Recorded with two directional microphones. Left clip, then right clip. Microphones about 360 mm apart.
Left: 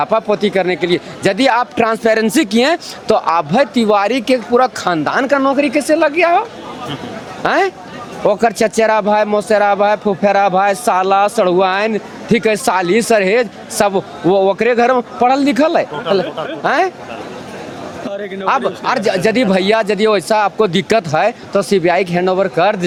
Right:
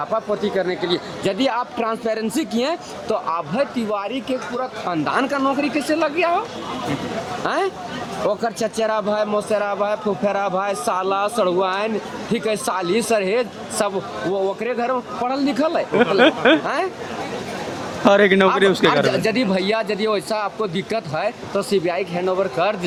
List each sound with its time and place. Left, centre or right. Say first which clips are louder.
0.0 s speech: left 8 dB; left
5.0 s speech: left 5 dB; left
7.4 s speech: left 9 dB; left
18.1 s a man's voice: right 13 dB; right
18.9 s speech: left 3 dB; left